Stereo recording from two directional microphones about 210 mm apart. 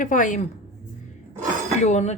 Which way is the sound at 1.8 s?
30° left (ahead or behind).